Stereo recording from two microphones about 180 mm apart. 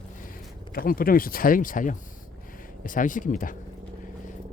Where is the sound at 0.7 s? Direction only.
55° left (ahead or behind).